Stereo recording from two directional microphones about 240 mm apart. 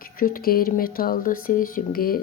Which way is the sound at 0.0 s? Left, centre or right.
Left.